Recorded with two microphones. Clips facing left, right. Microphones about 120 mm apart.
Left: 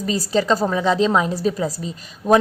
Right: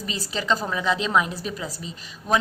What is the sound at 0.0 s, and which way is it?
A woman's voice, 40° left (ahead or behind).